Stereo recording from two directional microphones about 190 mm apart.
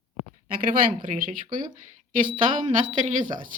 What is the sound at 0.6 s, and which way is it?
Speech, 45° right (ahead or behind).